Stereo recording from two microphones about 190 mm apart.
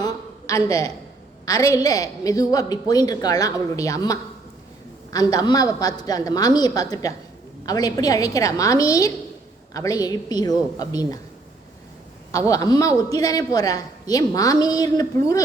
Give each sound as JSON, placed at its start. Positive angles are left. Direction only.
{"t": 0.0, "sound": "a sound", "side_deg": 20}
{"t": 1.5, "sound": "a woman's voice", "side_deg": 20}
{"t": 12.3, "sound": "a woman's voice", "side_deg": 15}